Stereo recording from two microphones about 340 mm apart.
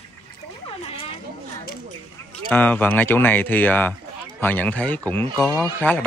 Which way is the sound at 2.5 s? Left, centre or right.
Centre.